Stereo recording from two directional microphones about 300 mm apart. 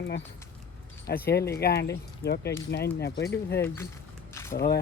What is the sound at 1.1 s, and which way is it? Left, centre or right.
Speech, left.